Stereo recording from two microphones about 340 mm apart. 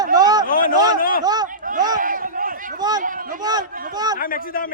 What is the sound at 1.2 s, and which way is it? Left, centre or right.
Speech, centre.